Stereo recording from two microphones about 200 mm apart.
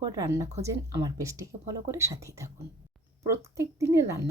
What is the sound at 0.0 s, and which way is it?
Speech, 15° right (ahead or behind).